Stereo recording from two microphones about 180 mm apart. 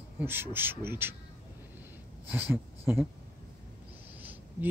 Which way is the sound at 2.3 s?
10° right (ahead or behind).